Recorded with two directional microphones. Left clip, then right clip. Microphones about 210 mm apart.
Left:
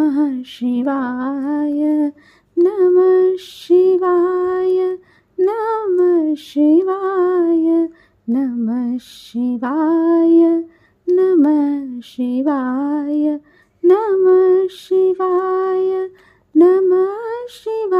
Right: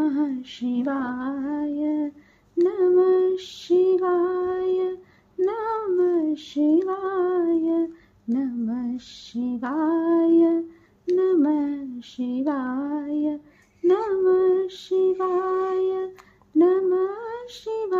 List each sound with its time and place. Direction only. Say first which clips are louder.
0.0 s lullaby: left 7 dB; 45° left (ahead or behind)
2.6 s female singing: left 6 dB; 45° left (ahead or behind)
13.8 s lullaby: left 8 dB; 45° left (ahead or behind)
16.5 s music: left 8 dB; 45° left (ahead or behind)